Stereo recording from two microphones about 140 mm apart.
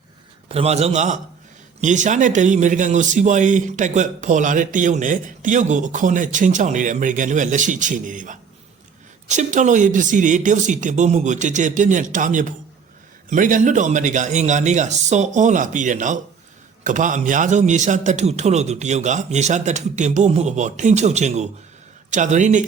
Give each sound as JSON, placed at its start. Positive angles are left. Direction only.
{"t": 0.4, "sound": "a man's voice", "side_deg": -45}